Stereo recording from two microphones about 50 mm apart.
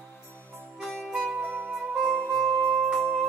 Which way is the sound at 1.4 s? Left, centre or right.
Right.